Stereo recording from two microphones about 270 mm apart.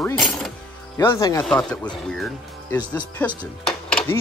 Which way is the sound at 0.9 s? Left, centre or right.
Centre.